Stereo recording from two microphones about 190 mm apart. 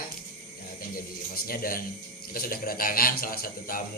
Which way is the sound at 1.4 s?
50° left (ahead or behind).